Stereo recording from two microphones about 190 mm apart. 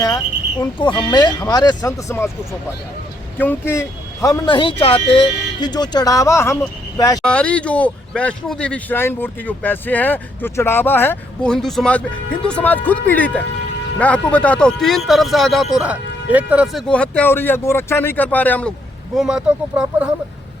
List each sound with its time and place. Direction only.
0.6 s speech: 25° left (ahead or behind)
3.3 s speech: 10° left (ahead or behind)
7.2 s speech: 5° left (ahead or behind)
19.1 s speech: 5° right (ahead or behind)